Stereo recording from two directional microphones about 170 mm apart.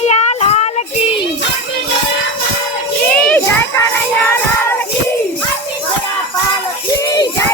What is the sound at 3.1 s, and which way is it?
Children playing, 5° left (ahead or behind).